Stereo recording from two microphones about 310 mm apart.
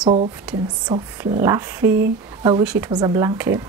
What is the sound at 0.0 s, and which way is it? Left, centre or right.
Speech, centre.